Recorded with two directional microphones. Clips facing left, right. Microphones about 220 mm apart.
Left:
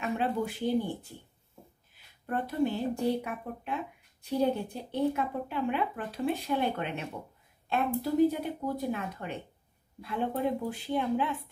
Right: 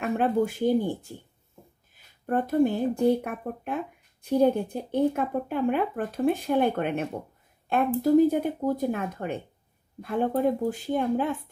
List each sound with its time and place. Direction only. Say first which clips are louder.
0.0 s speech: right 6 dB; 50° right (ahead or behind)
2.2 s speech: right 7 dB; 45° right (ahead or behind)